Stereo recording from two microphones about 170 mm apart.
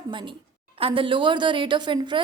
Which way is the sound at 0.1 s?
30° right (ahead or behind).